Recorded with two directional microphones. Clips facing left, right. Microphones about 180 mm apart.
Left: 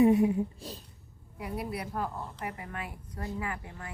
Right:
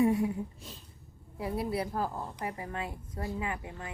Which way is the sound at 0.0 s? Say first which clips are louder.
Left 4 dB; 20° left (ahead or behind).